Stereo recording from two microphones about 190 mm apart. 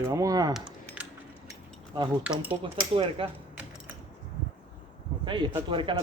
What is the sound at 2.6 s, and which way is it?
Speech, 30° right (ahead or behind).